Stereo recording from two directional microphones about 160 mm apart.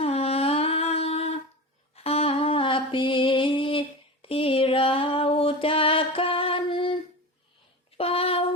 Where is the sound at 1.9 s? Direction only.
40° left (ahead or behind).